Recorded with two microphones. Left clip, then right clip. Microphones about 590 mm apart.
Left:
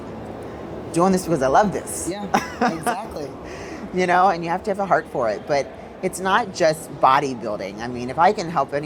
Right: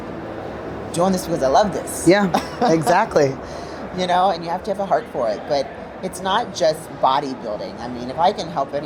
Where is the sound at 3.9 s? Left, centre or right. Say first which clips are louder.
Left 1 dB; left.